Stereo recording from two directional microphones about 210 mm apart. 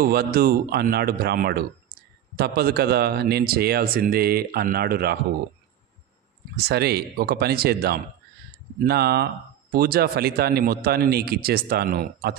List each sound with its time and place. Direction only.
0.0 s speech: 45° right (ahead or behind)
6.5 s speech: 50° right (ahead or behind)